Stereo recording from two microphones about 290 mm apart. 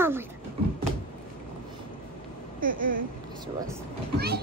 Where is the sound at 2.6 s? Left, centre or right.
Right.